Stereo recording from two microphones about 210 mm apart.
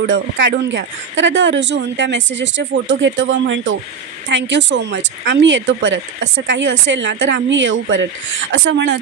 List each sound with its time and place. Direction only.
0.0 s speech: 60° right (ahead or behind)